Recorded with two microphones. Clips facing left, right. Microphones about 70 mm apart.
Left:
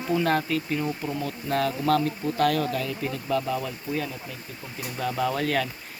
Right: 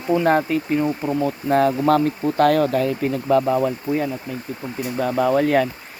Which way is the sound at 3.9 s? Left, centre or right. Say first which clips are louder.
Right 4 dB; right.